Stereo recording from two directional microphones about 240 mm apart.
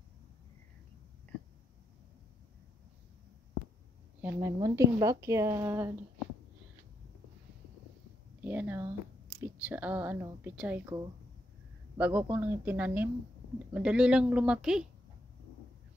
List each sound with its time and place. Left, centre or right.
4.2 s a woman's voice: centre
8.4 s a woman's voice: centre
12.0 s a woman's voice: centre